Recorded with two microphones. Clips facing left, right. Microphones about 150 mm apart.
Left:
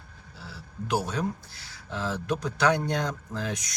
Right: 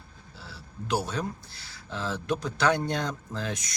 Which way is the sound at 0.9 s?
20° left (ahead or behind).